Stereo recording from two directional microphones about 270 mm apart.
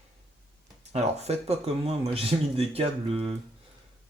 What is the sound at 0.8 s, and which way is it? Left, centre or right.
Speech, right.